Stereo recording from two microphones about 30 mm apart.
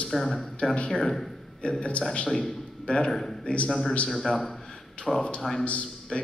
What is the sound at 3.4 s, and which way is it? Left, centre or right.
Speech, left.